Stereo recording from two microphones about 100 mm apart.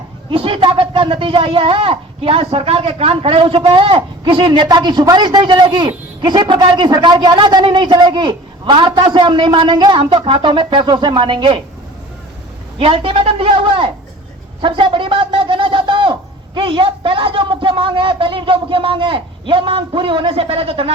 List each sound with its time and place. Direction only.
0.3 s a woman's voice: 65° right (ahead or behind)
12.8 s speech: 65° right (ahead or behind)
14.6 s a sound: 60° right (ahead or behind)
16.6 s speech: 60° right (ahead or behind); by 20.9 s 75° right (ahead or behind)